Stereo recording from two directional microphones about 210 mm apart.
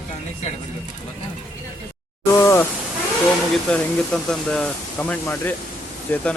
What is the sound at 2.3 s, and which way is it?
Speech, 15° left (ahead or behind).